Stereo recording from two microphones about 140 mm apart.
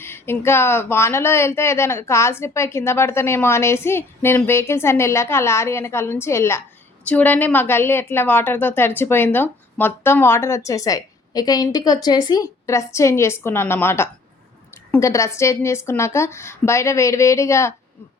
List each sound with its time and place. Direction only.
0.0 s a woman's voice: 15° left (ahead or behind)